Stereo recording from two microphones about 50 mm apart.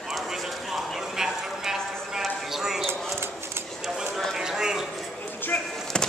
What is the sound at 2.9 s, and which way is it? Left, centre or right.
Bird, right.